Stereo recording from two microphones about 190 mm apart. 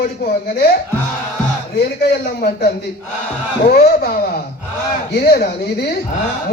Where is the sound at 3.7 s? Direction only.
55° left (ahead or behind).